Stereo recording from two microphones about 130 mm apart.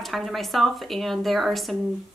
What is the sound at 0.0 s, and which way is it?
Speech, centre (ahead or behind).